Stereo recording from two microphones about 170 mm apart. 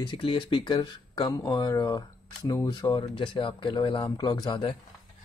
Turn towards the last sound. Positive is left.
turn(degrees=25)  # may be behind; listen again after turning